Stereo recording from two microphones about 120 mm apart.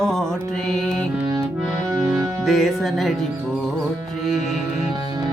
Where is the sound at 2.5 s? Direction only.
Centre (ahead or behind).